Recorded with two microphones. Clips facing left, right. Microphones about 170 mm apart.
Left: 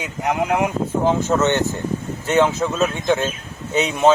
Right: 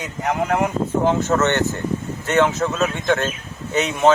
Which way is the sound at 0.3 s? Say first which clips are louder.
Left 1 dB; 10° left (ahead or behind).